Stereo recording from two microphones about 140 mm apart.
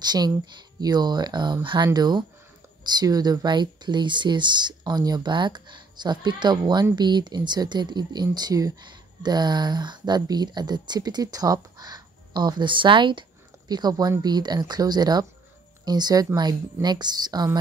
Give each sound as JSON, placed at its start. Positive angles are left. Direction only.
{"t": 0.0, "sound": "a woman's voice", "side_deg": -30}